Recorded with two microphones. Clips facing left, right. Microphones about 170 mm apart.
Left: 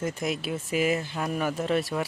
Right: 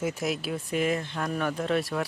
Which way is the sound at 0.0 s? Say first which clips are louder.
Even; 5° right (ahead or behind).